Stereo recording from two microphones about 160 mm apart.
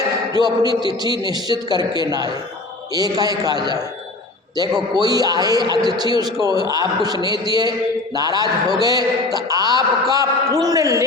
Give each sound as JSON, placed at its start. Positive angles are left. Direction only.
{"t": 0.0, "sound": "a sound", "side_deg": -25}
{"t": 1.0, "sound": "a man's voice", "side_deg": -25}
{"t": 4.9, "sound": "a man's voice", "side_deg": -25}